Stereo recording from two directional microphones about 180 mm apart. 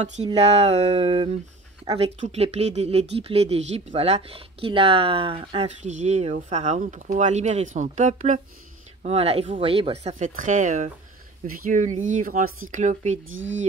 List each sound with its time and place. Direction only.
0.0 s speech: 40° right (ahead or behind)
13.3 s speech: 90° right